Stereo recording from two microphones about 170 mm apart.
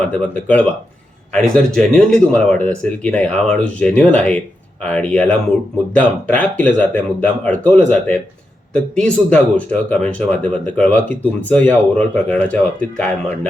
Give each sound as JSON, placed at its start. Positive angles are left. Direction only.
{"t": 0.0, "sound": "speech", "side_deg": 10}